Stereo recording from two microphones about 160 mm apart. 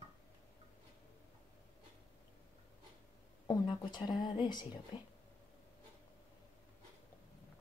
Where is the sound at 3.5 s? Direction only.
25° left (ahead or behind).